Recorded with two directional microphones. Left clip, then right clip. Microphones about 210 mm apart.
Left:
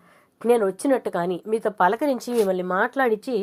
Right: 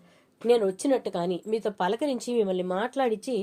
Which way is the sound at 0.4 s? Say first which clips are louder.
Left 3 dB; 20° left (ahead or behind).